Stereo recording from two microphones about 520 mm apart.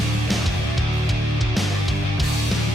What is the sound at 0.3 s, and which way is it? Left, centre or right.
Music, centre.